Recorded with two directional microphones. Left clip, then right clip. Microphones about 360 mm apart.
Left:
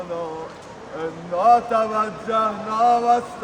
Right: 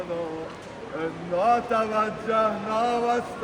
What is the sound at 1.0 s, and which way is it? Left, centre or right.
Mantra, left.